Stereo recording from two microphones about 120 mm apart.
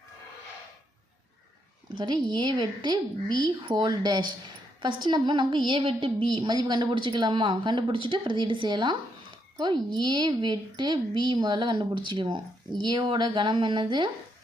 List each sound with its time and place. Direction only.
2.0 s a woman's voice: 40° right (ahead or behind)